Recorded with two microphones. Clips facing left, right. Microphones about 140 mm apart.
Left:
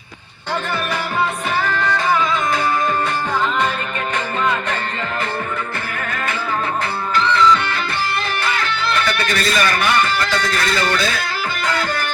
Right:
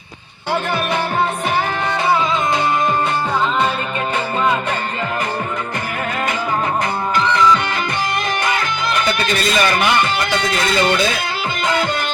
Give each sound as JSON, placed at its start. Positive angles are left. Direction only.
{"t": 1.6, "sound": "music", "side_deg": -20}
{"t": 7.2, "sound": "music", "side_deg": -15}